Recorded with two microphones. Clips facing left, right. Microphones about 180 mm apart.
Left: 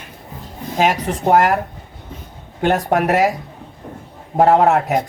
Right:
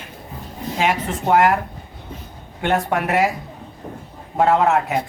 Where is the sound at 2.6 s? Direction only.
40° left (ahead or behind).